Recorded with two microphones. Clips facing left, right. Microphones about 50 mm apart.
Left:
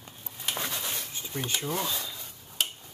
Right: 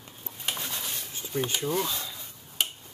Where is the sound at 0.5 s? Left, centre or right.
Left.